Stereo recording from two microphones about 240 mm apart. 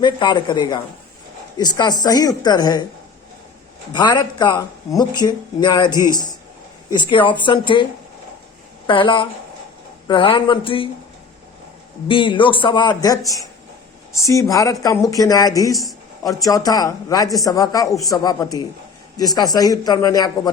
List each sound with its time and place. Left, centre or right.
0.0 s speech: centre
3.9 s speech: centre
8.9 s speech: left
12.0 s speech: left